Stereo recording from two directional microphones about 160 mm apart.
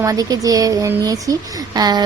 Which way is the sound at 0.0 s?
20° right (ahead or behind).